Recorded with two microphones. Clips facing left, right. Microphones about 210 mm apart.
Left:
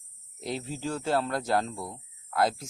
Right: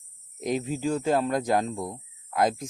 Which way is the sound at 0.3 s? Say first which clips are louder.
Right 6 dB; 15° right (ahead or behind).